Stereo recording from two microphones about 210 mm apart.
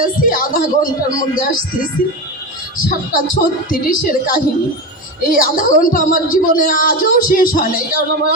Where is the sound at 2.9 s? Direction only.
40° left (ahead or behind).